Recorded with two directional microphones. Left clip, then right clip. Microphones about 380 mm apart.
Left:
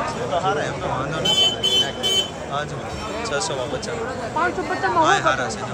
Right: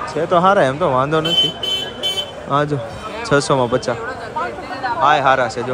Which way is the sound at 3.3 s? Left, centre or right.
Centre.